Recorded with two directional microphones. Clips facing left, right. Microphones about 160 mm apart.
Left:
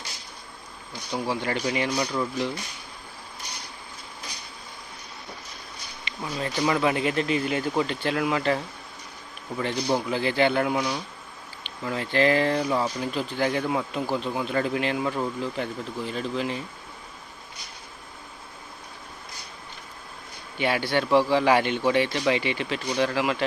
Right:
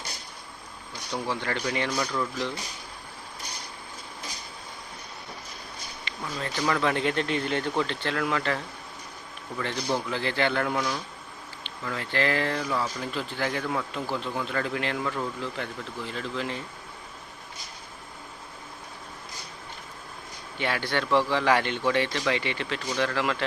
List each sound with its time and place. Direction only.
1.1 s speech: 15° left (ahead or behind)
6.1 s speech: 15° left (ahead or behind)
20.6 s speech: 15° left (ahead or behind)